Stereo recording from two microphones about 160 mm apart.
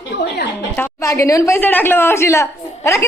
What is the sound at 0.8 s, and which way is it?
A woman's voice, 15° left (ahead or behind).